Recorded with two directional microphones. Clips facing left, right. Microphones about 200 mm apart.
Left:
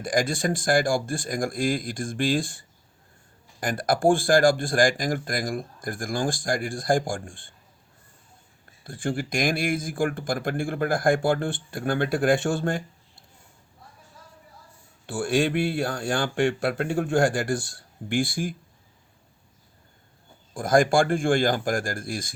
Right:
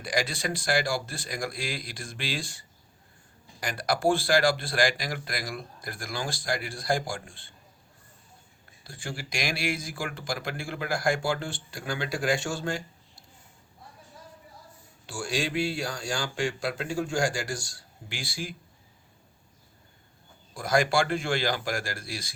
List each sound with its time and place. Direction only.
0.0 s speech: 50° left (ahead or behind)
8.8 s speech: 55° left (ahead or behind)
15.0 s speech: 55° left (ahead or behind)
20.5 s speech: 50° left (ahead or behind)